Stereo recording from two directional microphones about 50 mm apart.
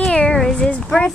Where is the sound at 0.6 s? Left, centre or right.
Left.